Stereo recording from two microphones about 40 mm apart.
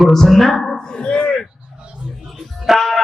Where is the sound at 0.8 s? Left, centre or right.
Left.